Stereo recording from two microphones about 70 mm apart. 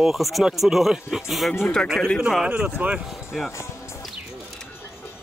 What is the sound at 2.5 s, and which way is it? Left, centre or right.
Speech, centre.